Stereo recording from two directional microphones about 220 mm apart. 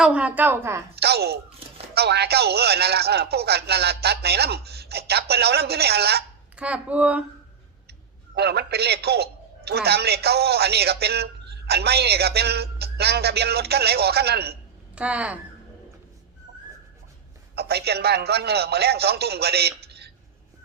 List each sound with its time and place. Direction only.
0.0 s a woman's voice: 5° right (ahead or behind)
0.9 s a man's voice: 45° right (ahead or behind)
6.6 s speech: 5° right (ahead or behind)
8.4 s a man's voice: 45° right (ahead or behind)
14.9 s speech: 5° right (ahead or behind)
17.5 s a man's voice: 45° right (ahead or behind)